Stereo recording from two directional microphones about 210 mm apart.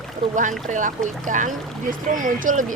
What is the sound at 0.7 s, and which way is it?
Speech, 35° right (ahead or behind).